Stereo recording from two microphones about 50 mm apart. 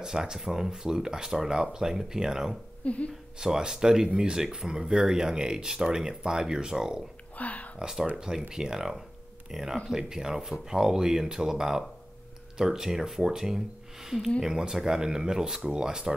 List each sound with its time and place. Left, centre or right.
0.0 s speech: centre
2.8 s speech: left
3.3 s speech: centre
7.3 s a sound: left
7.8 s speech: centre